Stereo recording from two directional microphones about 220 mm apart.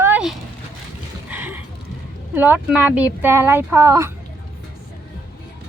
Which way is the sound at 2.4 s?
10° right (ahead or behind).